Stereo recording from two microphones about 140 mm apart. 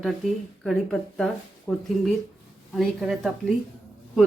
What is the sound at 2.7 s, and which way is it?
Speech, centre (ahead or behind).